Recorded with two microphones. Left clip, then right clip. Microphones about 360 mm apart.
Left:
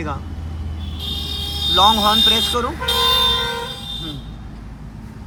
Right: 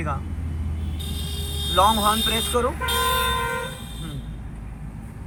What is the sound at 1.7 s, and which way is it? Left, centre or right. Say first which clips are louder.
Speech: left 5 dB; centre.